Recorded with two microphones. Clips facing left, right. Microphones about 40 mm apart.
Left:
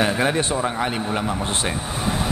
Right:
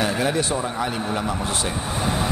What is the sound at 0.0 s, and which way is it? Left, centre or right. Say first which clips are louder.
A man's voice: left 2 dB; left.